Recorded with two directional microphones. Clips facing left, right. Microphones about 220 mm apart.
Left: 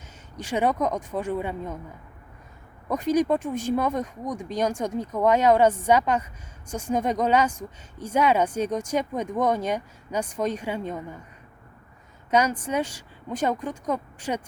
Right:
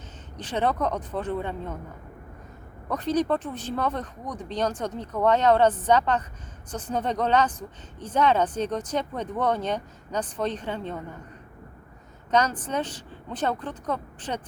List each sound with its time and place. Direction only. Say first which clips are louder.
0.3 s speech: left 2 dB; 10° left (ahead or behind)
2.9 s speech: left 2 dB; 10° left (ahead or behind)
12.3 s speech: left 1 dB; 10° left (ahead or behind)